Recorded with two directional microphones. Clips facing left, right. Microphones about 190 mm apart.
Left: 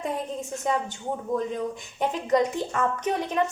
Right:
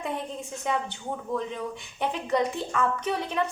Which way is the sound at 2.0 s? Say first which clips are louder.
Left 3 dB; 40° left (ahead or behind).